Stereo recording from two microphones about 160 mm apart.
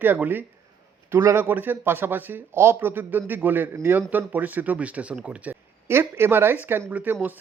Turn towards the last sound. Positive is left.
turn(degrees=-10)  # may be behind; listen again after turning